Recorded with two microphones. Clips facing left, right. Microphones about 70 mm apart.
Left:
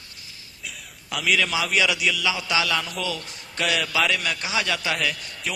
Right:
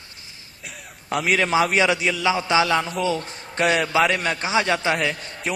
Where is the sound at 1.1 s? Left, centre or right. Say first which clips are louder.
Right 4 dB; right.